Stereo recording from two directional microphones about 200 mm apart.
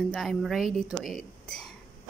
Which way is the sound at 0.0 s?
Centre (ahead or behind).